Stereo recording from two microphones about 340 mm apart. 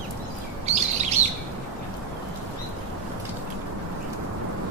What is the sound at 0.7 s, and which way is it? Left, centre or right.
Chirp, centre.